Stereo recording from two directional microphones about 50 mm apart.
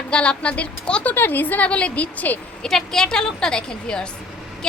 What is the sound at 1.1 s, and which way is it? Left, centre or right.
Speech, left.